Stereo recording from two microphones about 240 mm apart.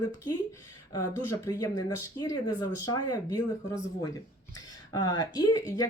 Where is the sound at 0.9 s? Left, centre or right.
Centre.